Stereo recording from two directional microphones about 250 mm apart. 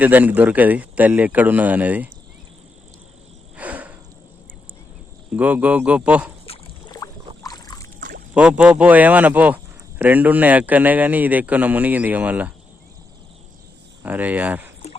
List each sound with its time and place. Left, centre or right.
0.0 s a man's voice: centre
3.6 s cricket: centre
5.3 s speech: centre
6.4 s boat: left
8.3 s a man's voice: centre
14.0 s a man's voice: centre